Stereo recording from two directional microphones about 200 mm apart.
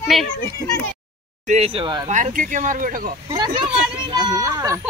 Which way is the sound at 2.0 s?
35° right (ahead or behind).